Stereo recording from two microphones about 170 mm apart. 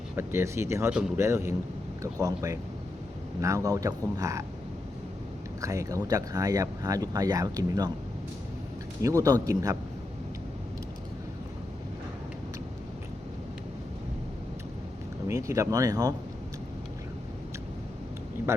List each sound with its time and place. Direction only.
0.2 s speech: 15° right (ahead or behind)
5.5 s speech: 20° right (ahead or behind)
9.0 s speech: 20° right (ahead or behind)
15.3 s speech: 15° right (ahead or behind)